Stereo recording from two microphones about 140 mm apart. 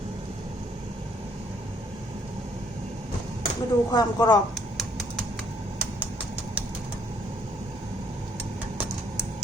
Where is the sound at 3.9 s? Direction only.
30° left (ahead or behind).